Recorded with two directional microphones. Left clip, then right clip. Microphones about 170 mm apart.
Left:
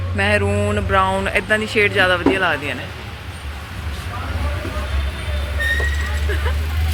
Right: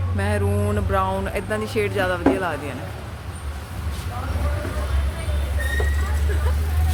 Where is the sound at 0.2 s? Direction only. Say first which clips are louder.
Left 7 dB; 5° left (ahead or behind).